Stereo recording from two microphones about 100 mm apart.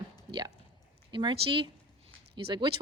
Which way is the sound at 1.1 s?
50° right (ahead or behind).